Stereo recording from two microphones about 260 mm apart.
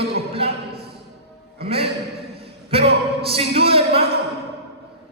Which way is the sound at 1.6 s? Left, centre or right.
Right.